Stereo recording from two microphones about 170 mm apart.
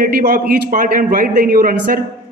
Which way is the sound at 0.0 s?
60° right (ahead or behind).